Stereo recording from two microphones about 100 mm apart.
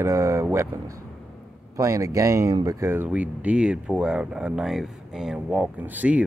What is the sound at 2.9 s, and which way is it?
Speech, 15° right (ahead or behind).